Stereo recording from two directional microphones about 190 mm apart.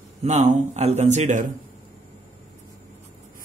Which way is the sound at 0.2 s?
35° right (ahead or behind).